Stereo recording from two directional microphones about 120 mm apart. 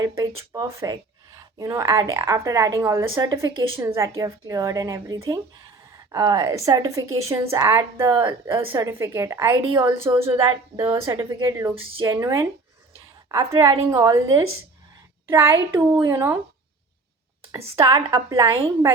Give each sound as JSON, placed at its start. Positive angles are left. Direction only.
{"t": 0.5, "sound": "speech", "side_deg": -30}
{"t": 15.3, "sound": "speech", "side_deg": -20}
{"t": 17.5, "sound": "a woman's voice", "side_deg": -35}